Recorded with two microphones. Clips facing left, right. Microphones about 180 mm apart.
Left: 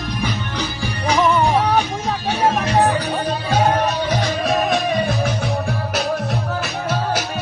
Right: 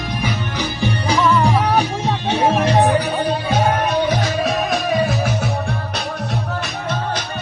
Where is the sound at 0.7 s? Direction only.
25° right (ahead or behind).